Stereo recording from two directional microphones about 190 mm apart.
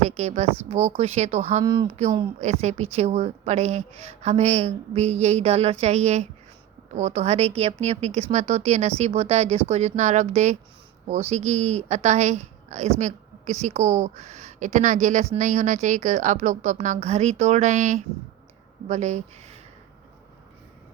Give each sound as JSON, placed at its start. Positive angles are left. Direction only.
{"t": 0.0, "sound": "a woman's voice", "side_deg": -35}
{"t": 1.6, "sound": "speech", "side_deg": -25}
{"t": 2.4, "sound": "a woman's voice", "side_deg": -35}